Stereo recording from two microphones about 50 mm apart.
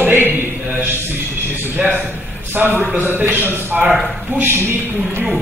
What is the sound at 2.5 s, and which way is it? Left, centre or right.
Speech, right.